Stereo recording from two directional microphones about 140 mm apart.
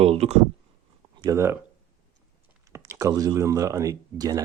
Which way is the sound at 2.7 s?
20° right (ahead or behind).